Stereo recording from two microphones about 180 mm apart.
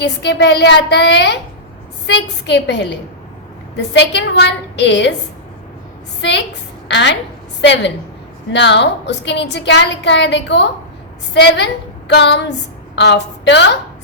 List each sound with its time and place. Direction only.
0.0 s a woman's voice: 75° left (ahead or behind)
6.8 s a woman's voice: 75° left (ahead or behind)